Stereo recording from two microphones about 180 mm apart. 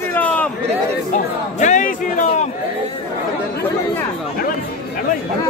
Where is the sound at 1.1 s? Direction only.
45° left (ahead or behind).